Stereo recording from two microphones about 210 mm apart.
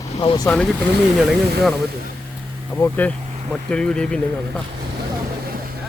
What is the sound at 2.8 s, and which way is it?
Speech, 10° left (ahead or behind).